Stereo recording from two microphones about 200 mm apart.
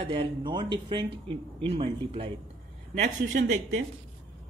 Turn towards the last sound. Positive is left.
turn(degrees=-35)  # may be behind; listen again after turning